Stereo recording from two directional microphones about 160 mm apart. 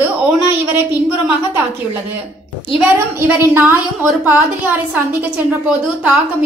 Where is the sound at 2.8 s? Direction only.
10° right (ahead or behind).